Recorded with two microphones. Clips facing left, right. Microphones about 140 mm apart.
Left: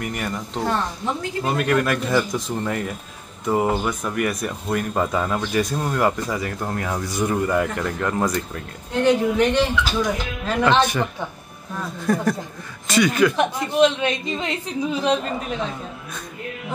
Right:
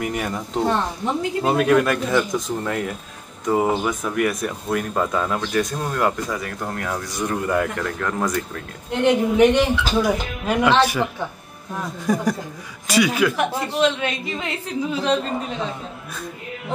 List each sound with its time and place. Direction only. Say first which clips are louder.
0.0 s speech: right 2 dB; 5° right (ahead or behind)
0.6 s a woman's voice: right 3 dB; 20° right (ahead or behind)
1.5 s speech: right 3 dB; 5° right (ahead or behind)
9.0 s speech: right 2 dB; 15° right (ahead or behind)
12.1 s speech: even; 15° right (ahead or behind)
13.7 s a woman's voice: left 4 dB; 20° left (ahead or behind)